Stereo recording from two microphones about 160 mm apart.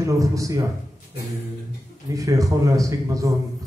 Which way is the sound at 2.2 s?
20° right (ahead or behind).